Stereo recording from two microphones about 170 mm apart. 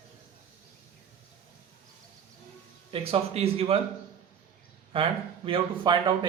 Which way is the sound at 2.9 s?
35° right (ahead or behind).